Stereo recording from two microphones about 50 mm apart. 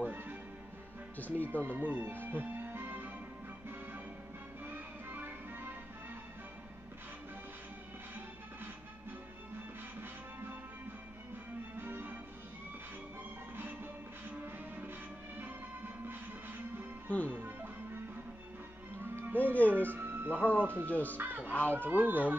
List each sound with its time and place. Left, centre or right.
0.0 s music: right
1.1 s speech: left
1.6 s speech: right
4.6 s music: right
11.7 s music: right
16.1 s music: right
19.3 s music: left
19.9 s music: right
20.3 s music: left
20.9 s speech: left
21.2 s music: right
21.5 s speech: left
21.8 s speech: right